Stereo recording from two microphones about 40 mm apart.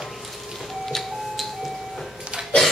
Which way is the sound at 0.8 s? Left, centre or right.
Centre.